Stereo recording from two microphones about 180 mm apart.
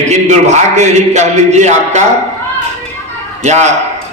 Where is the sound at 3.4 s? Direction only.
40° right (ahead or behind).